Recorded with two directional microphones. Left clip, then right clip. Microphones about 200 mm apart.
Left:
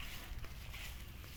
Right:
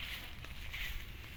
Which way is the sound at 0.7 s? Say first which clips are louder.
Right 8 dB; 5° right (ahead or behind).